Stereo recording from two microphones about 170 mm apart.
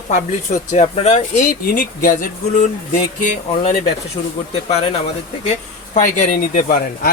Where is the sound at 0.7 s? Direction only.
40° left (ahead or behind).